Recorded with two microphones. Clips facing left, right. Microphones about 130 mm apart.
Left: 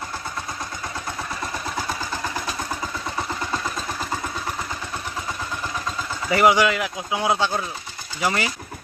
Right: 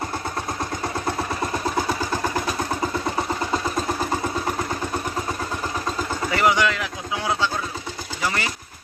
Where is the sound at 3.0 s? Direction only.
25° right (ahead or behind).